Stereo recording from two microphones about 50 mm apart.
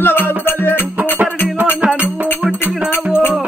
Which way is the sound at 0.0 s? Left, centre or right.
Left.